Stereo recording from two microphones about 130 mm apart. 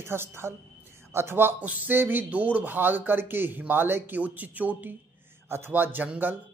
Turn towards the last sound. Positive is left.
turn(degrees=-10)  # may be behind; listen again after turning